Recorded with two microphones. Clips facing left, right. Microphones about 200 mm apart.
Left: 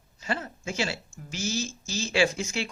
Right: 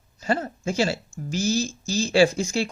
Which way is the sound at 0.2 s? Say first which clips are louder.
Right 7 dB; 40° right (ahead or behind).